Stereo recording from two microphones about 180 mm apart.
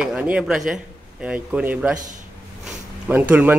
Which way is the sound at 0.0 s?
5° right (ahead or behind).